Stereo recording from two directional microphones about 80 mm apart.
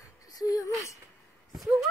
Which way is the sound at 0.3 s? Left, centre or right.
Left.